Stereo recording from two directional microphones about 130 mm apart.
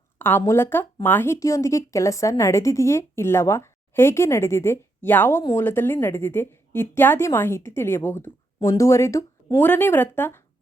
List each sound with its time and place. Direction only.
0.2 s a woman's voice: 15° left (ahead or behind)
8.5 s a woman's voice: 30° left (ahead or behind)